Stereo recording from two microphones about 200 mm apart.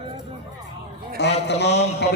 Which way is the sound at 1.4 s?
60° left (ahead or behind).